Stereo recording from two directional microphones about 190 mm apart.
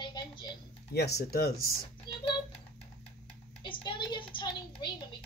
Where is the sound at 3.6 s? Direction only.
25° left (ahead or behind).